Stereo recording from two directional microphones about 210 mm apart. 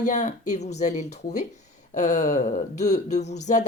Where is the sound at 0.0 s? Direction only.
35° left (ahead or behind).